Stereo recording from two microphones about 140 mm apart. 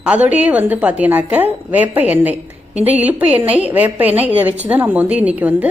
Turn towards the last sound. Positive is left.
turn(degrees=-10)  # may be behind; listen again after turning